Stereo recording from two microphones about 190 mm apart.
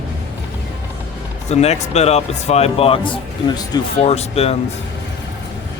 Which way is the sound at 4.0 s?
35° left (ahead or behind).